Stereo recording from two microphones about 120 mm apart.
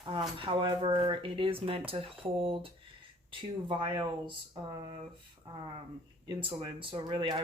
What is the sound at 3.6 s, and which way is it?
Speech, 40° right (ahead or behind).